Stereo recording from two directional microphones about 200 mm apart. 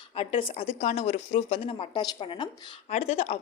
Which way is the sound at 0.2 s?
30° left (ahead or behind).